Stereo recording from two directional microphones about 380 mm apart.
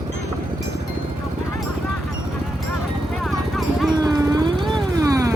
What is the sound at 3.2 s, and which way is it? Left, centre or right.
Vehicle, centre.